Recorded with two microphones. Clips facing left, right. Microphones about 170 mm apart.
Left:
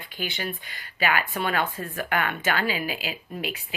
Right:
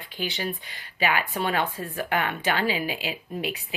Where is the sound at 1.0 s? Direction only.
20° right (ahead or behind).